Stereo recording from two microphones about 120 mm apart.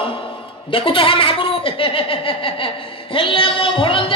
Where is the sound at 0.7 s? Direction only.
45° left (ahead or behind).